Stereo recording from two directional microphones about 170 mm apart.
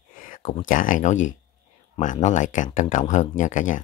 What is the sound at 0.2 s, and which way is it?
Speech, 50° left (ahead or behind).